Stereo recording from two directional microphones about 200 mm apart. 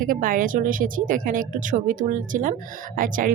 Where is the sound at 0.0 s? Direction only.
45° right (ahead or behind).